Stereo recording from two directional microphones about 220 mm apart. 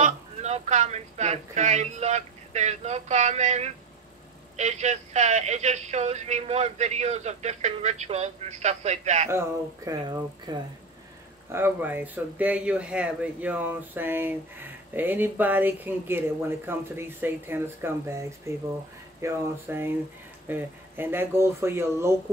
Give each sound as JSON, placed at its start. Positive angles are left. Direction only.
{"t": 0.0, "sound": "speech", "side_deg": -30}
{"t": 9.8, "sound": "speech", "side_deg": -20}